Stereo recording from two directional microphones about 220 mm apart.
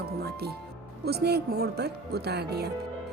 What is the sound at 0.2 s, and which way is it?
Speech, 45° right (ahead or behind).